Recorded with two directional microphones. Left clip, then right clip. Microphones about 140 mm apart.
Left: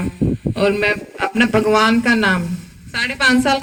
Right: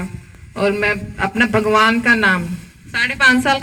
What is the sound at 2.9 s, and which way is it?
Speech, 25° left (ahead or behind).